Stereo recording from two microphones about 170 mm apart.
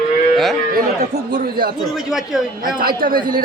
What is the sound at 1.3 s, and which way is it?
Speech, 60° right (ahead or behind).